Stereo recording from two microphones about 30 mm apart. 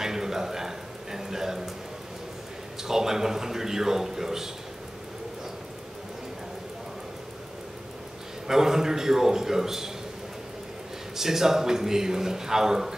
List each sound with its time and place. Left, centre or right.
0.0 s a man's voice: centre
2.8 s a man's voice: centre
8.5 s a man's voice: centre
11.1 s a man's voice: centre